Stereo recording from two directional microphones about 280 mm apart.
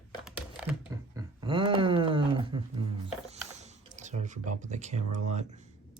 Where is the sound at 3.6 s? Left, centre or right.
Right.